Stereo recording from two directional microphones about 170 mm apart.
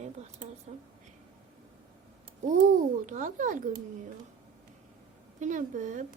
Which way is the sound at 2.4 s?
45° right (ahead or behind).